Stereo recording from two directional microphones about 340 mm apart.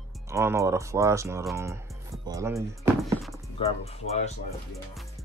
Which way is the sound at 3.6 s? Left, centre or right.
Centre.